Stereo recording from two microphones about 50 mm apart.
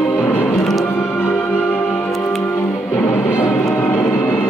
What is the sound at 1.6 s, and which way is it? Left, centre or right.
Music, left.